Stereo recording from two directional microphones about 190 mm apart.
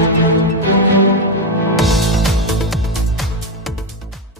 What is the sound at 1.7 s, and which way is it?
Music, centre (ahead or behind).